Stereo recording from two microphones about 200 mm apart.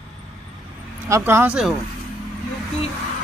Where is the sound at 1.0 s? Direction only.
15° right (ahead or behind).